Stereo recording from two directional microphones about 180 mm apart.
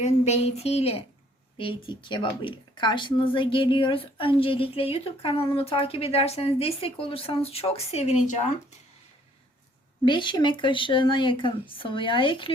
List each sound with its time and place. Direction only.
0.0 s speech: 35° left (ahead or behind)
10.1 s speech: 25° left (ahead or behind)